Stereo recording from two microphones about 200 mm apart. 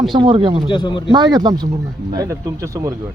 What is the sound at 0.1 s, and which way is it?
Speech, 25° right (ahead or behind).